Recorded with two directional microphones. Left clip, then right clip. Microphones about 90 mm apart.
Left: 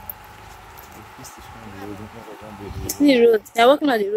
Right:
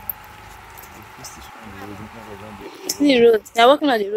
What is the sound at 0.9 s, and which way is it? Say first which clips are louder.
Speech: right 2 dB; centre (ahead or behind).